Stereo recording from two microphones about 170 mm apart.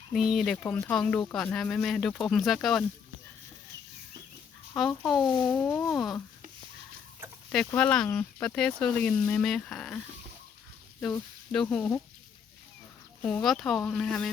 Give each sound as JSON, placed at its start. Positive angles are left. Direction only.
{"t": 0.1, "sound": "speech", "side_deg": 0}
{"t": 4.7, "sound": "speech", "side_deg": 5}
{"t": 7.5, "sound": "speech", "side_deg": 5}
{"t": 11.5, "sound": "speech", "side_deg": 5}
{"t": 13.2, "sound": "speech", "side_deg": 5}